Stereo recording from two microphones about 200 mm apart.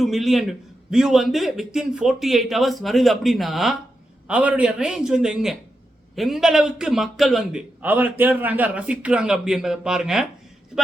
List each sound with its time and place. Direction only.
0.0 s a man's voice: centre (ahead or behind)